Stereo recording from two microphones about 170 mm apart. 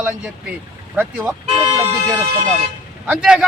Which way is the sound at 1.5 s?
35° right (ahead or behind).